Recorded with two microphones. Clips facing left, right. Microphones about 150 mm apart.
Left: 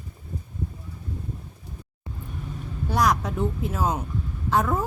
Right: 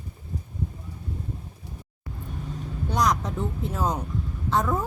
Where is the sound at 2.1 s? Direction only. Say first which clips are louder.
Even; 20° left (ahead or behind).